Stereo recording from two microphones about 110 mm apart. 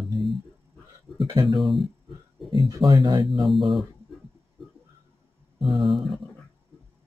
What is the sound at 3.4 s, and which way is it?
Speech, centre (ahead or behind).